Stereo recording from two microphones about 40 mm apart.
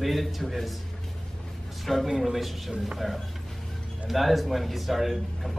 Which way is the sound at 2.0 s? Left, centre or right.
Centre.